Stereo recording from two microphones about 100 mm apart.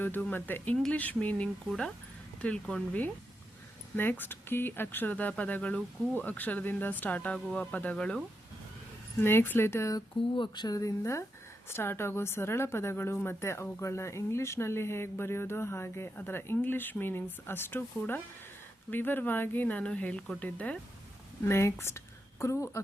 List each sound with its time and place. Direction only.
0.0 s speech: 20° left (ahead or behind)
9.2 s speech: 20° left (ahead or behind)
10.3 s speech: 50° left (ahead or behind); by 20.7 s 15° left (ahead or behind)
21.4 s speech: 25° left (ahead or behind)